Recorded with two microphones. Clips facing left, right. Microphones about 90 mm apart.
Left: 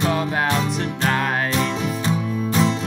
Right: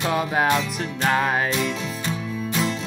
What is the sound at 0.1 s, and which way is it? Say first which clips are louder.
Music: right 1 dB; 5° right (ahead or behind).